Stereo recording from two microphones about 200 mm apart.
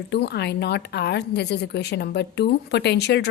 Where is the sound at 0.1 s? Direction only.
55° left (ahead or behind).